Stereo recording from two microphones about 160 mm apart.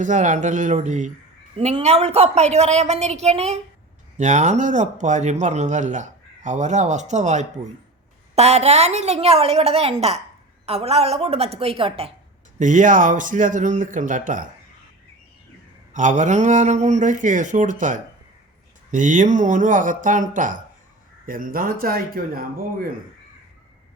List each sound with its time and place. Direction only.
0.0 s a woman's voice: 50° right (ahead or behind); by 12.1 s 35° right (ahead or behind)
12.5 s speech: 50° right (ahead or behind)
15.9 s speech: 50° right (ahead or behind)